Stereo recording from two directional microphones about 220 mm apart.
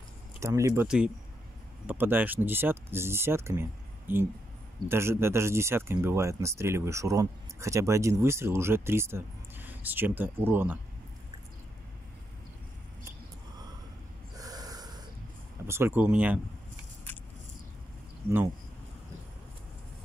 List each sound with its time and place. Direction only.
0.4 s speech: 15° right (ahead or behind)
14.3 s snort: 15° right (ahead or behind)
15.6 s speech: 10° right (ahead or behind)